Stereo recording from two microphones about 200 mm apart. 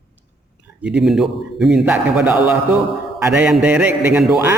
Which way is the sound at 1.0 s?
Centre (ahead or behind).